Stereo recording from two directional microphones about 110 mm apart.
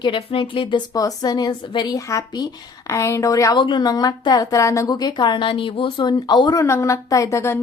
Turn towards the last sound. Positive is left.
turn(degrees=25)  # may be behind; listen again after turning